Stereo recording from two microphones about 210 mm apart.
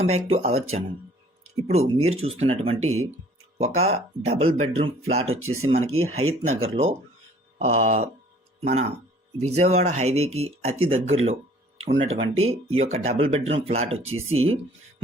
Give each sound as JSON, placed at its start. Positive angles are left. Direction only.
{"t": 0.0, "sound": "speech", "side_deg": -30}
{"t": 5.2, "sound": "speech", "side_deg": -80}
{"t": 5.6, "sound": "speech", "side_deg": -30}
{"t": 5.9, "sound": "speech", "side_deg": -85}
{"t": 6.5, "sound": "speech", "side_deg": -30}
{"t": 14.0, "sound": "speech", "side_deg": -80}